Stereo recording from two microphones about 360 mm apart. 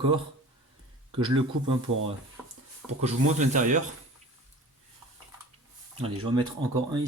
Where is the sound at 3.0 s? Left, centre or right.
Centre.